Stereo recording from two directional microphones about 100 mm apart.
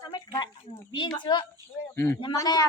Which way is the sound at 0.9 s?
50° left (ahead or behind).